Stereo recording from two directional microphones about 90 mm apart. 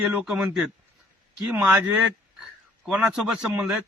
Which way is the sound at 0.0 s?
15° right (ahead or behind).